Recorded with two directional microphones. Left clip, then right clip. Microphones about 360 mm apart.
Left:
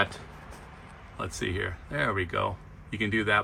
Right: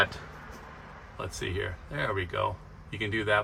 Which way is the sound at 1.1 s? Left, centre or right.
Centre.